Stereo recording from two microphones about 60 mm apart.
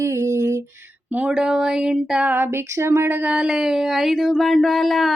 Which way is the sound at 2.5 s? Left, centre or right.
Right.